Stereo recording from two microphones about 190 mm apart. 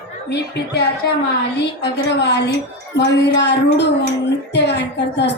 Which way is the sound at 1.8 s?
65° left (ahead or behind).